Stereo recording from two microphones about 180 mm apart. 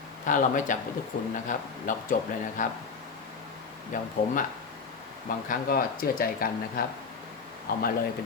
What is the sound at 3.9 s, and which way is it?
Speech, 45° left (ahead or behind).